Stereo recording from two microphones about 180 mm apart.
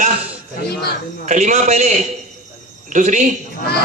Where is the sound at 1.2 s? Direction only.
40° right (ahead or behind).